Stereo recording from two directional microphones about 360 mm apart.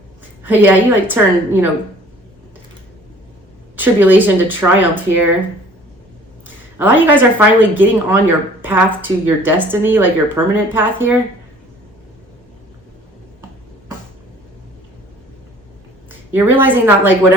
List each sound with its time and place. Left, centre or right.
0.4 s a woman's voice: centre
3.8 s a woman's voice: centre
6.7 s a woman's voice: centre
16.3 s a woman's voice: centre